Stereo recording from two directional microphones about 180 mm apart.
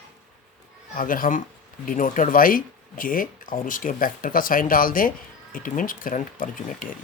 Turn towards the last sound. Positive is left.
turn(degrees=50)  # may be behind; listen again after turning